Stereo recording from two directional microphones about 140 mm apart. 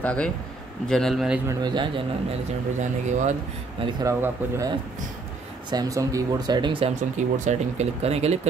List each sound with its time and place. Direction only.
0.0 s a man's voice: 10° left (ahead or behind)
1.5 s speech: 30° right (ahead or behind)
2.8 s speech: 60° right (ahead or behind)
4.0 s speech: 20° right (ahead or behind)
7.0 s speech: 60° right (ahead or behind)